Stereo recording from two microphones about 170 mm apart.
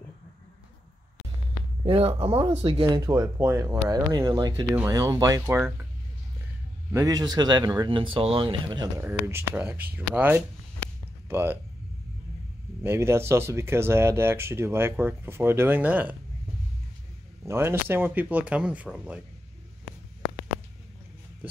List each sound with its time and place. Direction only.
1.9 s speech: 35° right (ahead or behind); by 5.6 s 15° right (ahead or behind)
6.9 s speech: 20° right (ahead or behind)
9.0 s speech: 15° right (ahead or behind)
12.8 s speech: 15° right (ahead or behind)
17.5 s speech: 15° right (ahead or behind)